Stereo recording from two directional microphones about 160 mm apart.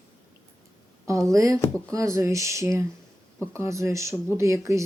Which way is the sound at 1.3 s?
20° right (ahead or behind).